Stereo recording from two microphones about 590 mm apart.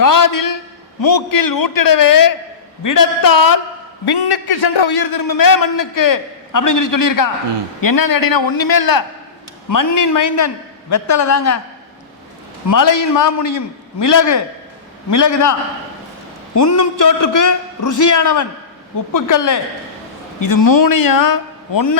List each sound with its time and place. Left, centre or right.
0.0 s a man's voice: left
12.6 s a man's voice: left
16.6 s a man's voice: left